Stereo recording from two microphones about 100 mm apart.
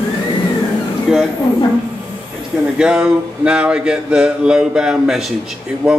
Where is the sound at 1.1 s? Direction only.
5° right (ahead or behind).